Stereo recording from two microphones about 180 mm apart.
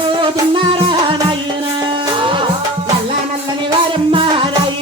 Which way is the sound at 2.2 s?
30° right (ahead or behind).